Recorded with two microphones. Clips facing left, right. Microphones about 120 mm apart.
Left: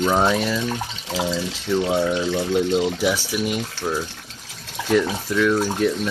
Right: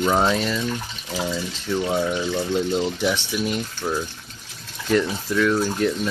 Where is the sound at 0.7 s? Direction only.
85° left.